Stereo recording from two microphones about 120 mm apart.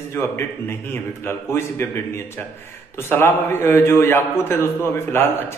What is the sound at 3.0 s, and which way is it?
Speech, 20° left (ahead or behind).